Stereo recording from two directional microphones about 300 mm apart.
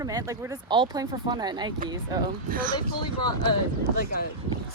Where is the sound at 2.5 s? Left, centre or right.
Right.